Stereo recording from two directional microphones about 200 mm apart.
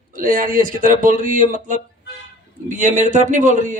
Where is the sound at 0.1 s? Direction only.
45° right (ahead or behind).